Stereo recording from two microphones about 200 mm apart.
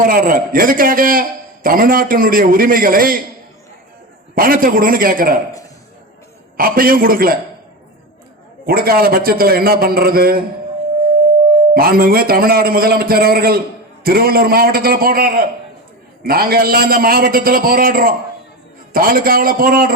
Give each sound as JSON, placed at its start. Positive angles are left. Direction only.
{"t": 0.0, "sound": "a man's voice", "side_deg": -45}
{"t": 4.4, "sound": "a man's voice", "side_deg": -45}
{"t": 6.6, "sound": "a man's voice", "side_deg": -45}
{"t": 8.6, "sound": "a man's voice", "side_deg": -50}
{"t": 11.7, "sound": "a man's voice", "side_deg": -50}